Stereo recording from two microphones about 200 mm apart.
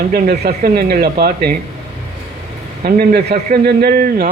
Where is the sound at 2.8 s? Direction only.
50° right (ahead or behind).